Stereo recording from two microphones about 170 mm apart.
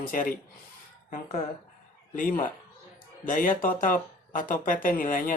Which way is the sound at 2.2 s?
55° left (ahead or behind).